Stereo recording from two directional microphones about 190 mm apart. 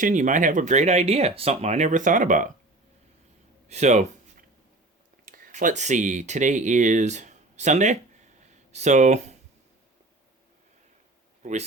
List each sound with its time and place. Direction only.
0.0 s speech: 40° right (ahead or behind)
3.7 s a sound: 35° right (ahead or behind)
5.2 s speech: 45° right (ahead or behind)
11.4 s speech: 40° right (ahead or behind)